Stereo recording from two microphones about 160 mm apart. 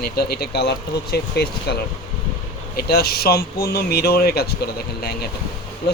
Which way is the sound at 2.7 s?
70° left (ahead or behind).